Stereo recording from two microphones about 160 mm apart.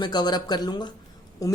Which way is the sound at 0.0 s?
25° left (ahead or behind).